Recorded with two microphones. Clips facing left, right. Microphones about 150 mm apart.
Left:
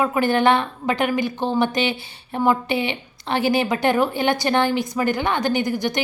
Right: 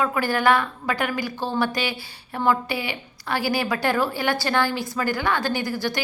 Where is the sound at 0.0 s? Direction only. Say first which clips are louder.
Left 4 dB; 20° left (ahead or behind).